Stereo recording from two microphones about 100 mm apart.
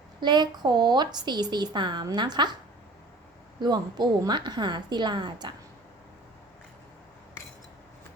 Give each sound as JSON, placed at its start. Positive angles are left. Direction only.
{"t": 0.2, "sound": "a woman's voice", "side_deg": -45}
{"t": 3.6, "sound": "a woman's voice", "side_deg": -45}